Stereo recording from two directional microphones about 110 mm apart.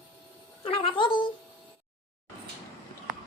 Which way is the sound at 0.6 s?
55° left (ahead or behind).